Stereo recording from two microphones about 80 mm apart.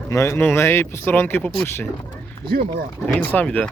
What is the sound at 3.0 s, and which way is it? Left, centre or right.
Speech, centre.